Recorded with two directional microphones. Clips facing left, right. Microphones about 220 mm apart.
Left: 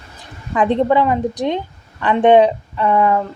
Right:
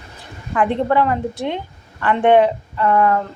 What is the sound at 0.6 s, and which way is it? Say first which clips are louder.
A woman's voice: left 2 dB; 20° left (ahead or behind).